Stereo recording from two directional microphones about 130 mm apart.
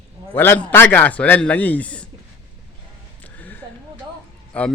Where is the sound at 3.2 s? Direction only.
15° left (ahead or behind).